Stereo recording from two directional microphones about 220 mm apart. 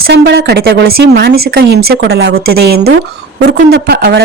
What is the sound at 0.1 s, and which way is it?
Speech, 50° right (ahead or behind).